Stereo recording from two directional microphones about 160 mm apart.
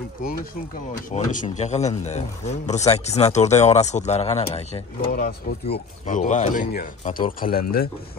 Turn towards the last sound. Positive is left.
turn(degrees=70)  # may be behind; listen again after turning